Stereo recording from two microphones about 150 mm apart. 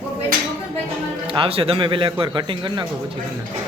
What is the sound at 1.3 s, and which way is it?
A man's voice, 40° right (ahead or behind).